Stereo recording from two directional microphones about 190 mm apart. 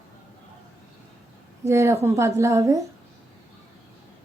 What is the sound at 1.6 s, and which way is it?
A woman's voice, 15° right (ahead or behind).